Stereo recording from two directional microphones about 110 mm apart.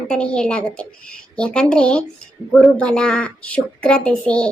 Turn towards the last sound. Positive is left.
turn(degrees=10)  # may be behind; listen again after turning